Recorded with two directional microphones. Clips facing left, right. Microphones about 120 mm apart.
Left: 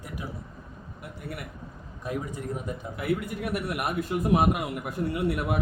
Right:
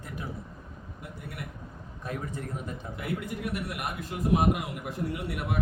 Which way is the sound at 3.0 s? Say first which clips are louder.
Left 5 dB; 60° left (ahead or behind).